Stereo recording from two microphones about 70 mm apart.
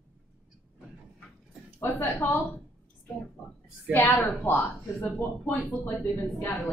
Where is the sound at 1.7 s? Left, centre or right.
Left.